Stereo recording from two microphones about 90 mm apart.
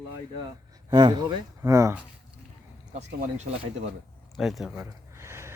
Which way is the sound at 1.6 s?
35° right (ahead or behind).